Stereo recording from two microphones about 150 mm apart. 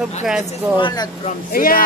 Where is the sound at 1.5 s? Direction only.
70° left (ahead or behind).